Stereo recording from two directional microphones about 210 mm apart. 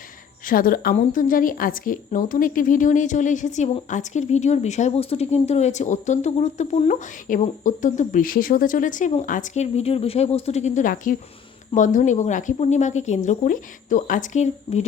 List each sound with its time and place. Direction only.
0.4 s a woman's voice: 40° left (ahead or behind)